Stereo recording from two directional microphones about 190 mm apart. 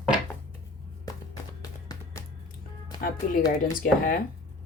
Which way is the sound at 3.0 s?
45° left (ahead or behind).